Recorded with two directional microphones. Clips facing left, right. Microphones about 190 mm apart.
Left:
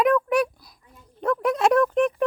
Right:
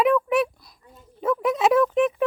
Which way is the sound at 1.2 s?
Centre (ahead or behind).